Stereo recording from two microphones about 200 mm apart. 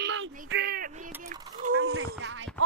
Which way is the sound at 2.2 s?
75° right (ahead or behind).